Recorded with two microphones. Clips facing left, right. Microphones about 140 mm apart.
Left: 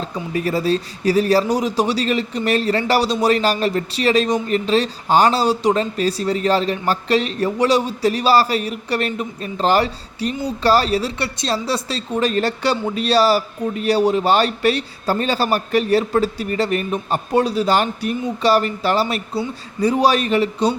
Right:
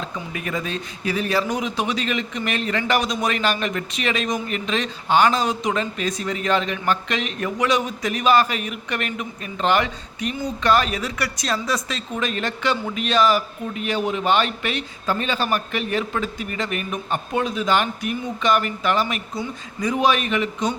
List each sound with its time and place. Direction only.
0.0 s speech: 35° left (ahead or behind)